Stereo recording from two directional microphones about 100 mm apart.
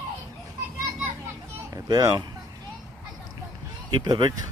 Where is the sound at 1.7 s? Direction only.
40° right (ahead or behind).